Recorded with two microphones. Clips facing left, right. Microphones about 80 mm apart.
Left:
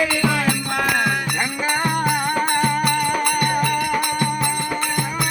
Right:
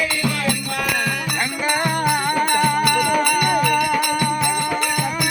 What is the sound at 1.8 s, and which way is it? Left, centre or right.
Music, centre.